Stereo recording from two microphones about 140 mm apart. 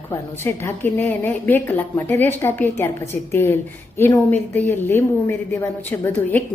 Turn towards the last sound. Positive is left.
turn(degrees=15)  # may be behind; listen again after turning